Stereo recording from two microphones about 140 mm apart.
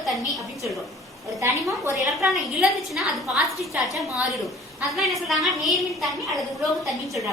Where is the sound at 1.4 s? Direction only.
20° right (ahead or behind).